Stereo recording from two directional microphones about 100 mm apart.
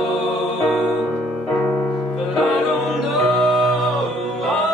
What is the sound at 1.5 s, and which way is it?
Music, 10° left (ahead or behind).